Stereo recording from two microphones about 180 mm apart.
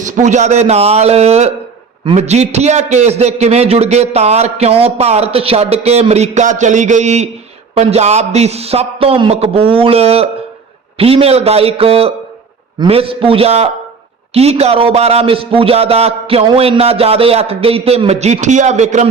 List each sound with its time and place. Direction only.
0.0 s a man's voice: 40° right (ahead or behind)